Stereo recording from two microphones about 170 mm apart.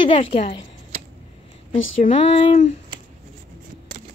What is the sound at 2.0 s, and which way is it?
Speech, 35° left (ahead or behind).